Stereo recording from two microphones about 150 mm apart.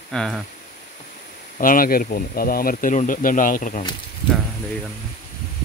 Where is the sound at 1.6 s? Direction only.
70° left (ahead or behind).